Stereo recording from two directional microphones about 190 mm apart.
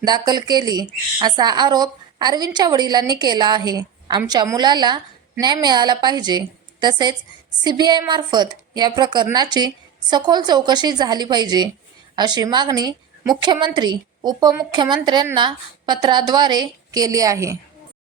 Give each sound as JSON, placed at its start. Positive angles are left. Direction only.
{"t": 0.0, "sound": "a woman's voice", "side_deg": -20}